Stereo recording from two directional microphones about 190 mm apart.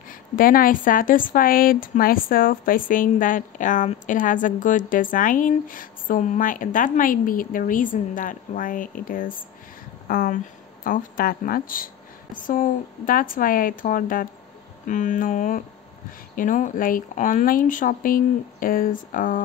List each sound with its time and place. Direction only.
0.1 s speech: 50° left (ahead or behind)